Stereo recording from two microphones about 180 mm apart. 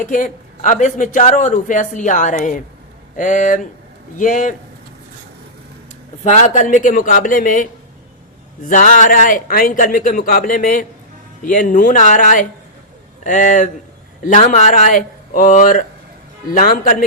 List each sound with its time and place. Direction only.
0.0 s speech: 45° left (ahead or behind)
6.2 s speech: 40° left (ahead or behind)